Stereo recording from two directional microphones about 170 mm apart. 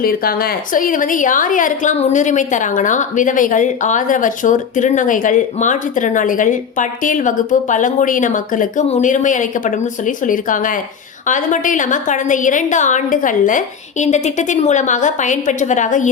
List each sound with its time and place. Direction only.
0.0 s a woman's voice: 60° left (ahead or behind)